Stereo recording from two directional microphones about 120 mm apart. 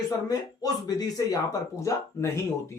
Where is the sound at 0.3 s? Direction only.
30° left (ahead or behind).